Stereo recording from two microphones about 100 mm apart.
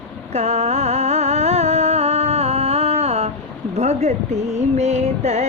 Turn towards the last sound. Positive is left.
turn(degrees=-90)